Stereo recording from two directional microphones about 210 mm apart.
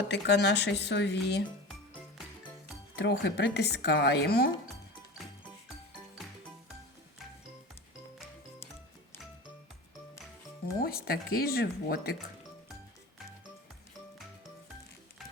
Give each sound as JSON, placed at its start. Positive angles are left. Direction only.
{"t": 0.1, "sound": "speech", "side_deg": 55}
{"t": 2.9, "sound": "speech", "side_deg": 55}
{"t": 10.8, "sound": "speech", "side_deg": 45}